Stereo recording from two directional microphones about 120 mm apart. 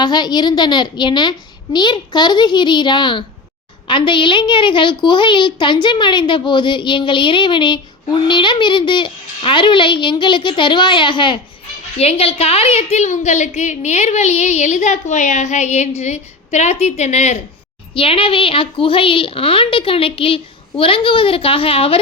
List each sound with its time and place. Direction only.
0.0 s a woman's voice: 40° left (ahead or behind)
11.9 s a woman's voice: 55° left (ahead or behind)
17.9 s a child's voice: 50° left (ahead or behind)